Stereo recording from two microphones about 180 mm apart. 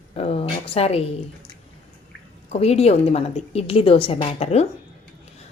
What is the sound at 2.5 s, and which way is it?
A woman's voice, 35° left (ahead or behind).